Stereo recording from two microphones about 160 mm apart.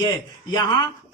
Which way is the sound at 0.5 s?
25° left (ahead or behind).